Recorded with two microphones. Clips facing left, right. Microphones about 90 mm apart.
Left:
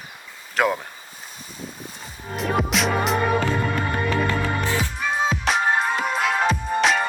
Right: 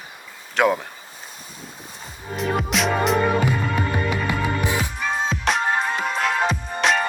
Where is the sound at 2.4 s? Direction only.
Centre (ahead or behind).